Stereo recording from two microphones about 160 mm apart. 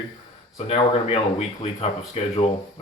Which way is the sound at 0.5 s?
40° left (ahead or behind).